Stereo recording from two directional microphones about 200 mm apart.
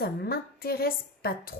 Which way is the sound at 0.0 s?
50° left (ahead or behind).